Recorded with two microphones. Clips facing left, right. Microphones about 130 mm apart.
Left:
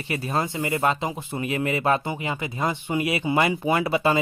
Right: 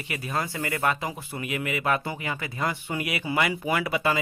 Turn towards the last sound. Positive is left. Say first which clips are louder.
# left 4 dB
turn(degrees=30)  # may be behind; listen again after turning